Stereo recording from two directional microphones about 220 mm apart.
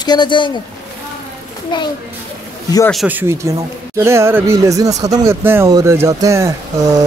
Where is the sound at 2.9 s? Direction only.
5° right (ahead or behind).